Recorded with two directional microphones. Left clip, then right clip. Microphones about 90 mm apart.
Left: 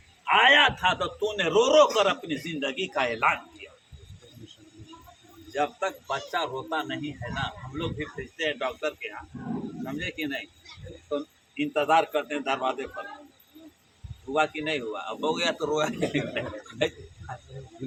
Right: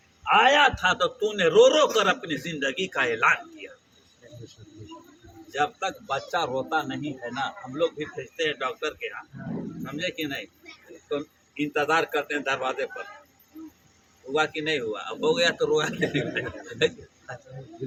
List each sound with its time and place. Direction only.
0.3 s a man's voice: 20° left (ahead or behind)
5.5 s a man's voice: 30° left (ahead or behind)
14.3 s a man's voice: 30° left (ahead or behind)